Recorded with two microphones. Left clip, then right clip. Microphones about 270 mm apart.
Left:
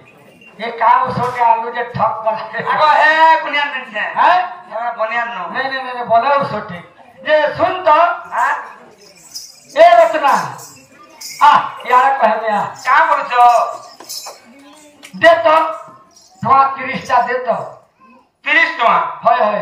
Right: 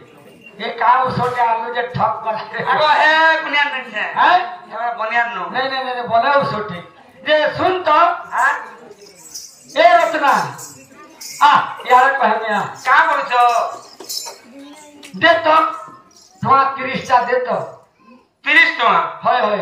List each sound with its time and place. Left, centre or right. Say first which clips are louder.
0.6 s a man's voice: left 2 dB; centre
9.7 s a man's voice: left 4 dB; centre
11.3 s a man's voice: left 2 dB; centre
15.1 s a man's voice: left 3 dB; centre